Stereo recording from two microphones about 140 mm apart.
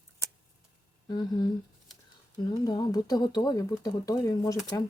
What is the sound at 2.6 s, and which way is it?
Speech, 25° left (ahead or behind).